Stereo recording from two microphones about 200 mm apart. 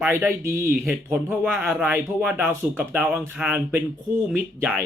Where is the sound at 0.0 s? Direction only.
10° right (ahead or behind).